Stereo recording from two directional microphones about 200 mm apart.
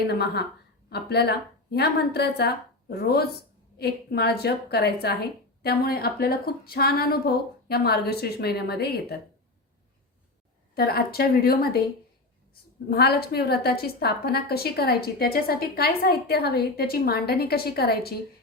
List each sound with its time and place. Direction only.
0.1 s a woman's voice: 55° left (ahead or behind)
10.8 s a woman's voice: 50° left (ahead or behind)
12.9 s a woman's voice: 50° left (ahead or behind)